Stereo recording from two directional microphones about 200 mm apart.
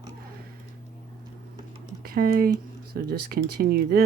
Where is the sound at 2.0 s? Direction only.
50° right (ahead or behind).